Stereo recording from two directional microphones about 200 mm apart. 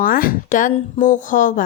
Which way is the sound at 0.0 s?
45° left (ahead or behind).